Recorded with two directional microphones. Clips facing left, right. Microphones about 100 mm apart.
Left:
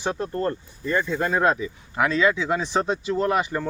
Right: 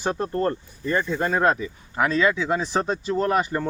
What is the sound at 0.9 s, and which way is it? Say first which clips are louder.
Speech: even; centre (ahead or behind).